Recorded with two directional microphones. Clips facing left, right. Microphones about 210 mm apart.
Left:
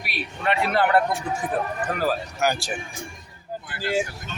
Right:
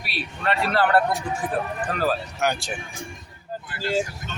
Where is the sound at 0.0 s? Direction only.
15° left (ahead or behind).